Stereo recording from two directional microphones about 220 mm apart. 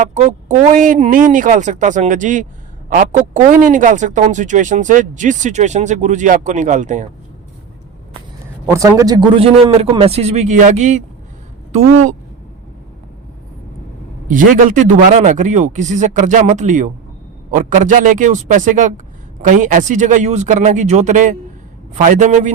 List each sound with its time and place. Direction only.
0.0 s speech: 30° right (ahead or behind)
8.7 s a man's voice: 15° right (ahead or behind); by 12.1 s 35° right (ahead or behind)
14.3 s speech: 35° right (ahead or behind)